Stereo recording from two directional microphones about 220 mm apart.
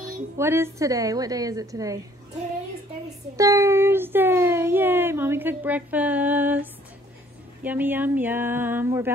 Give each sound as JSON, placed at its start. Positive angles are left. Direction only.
{"t": 0.4, "sound": "a woman's voice", "side_deg": -10}
{"t": 3.3, "sound": "a woman's voice", "side_deg": -15}